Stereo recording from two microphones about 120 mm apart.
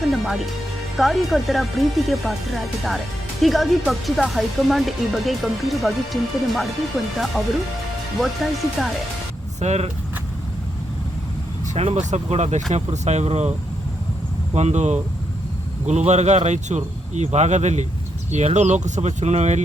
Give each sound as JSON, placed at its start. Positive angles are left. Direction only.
{"t": 0.1, "sound": "speech", "side_deg": 0}
{"t": 8.2, "sound": "speech", "side_deg": 0}
{"t": 9.6, "sound": "speech", "side_deg": -65}
{"t": 11.7, "sound": "speech", "side_deg": -60}
{"t": 14.5, "sound": "speech", "side_deg": -70}